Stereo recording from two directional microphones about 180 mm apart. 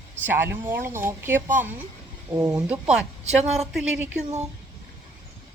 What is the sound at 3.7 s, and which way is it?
Speech, 5° right (ahead or behind).